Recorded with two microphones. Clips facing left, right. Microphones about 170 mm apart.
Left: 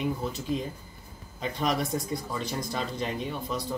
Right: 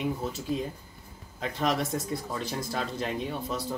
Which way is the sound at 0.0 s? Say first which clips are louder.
Left 1 dB; 5° right (ahead or behind).